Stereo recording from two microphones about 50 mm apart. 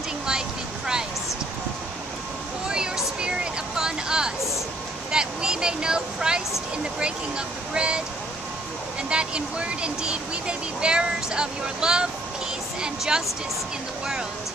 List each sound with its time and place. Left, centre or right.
3.2 s a sound: centre
5.1 s speech: centre
9.1 s a woman's voice: right